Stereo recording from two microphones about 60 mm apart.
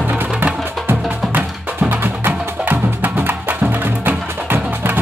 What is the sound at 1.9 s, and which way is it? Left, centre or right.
Music, right.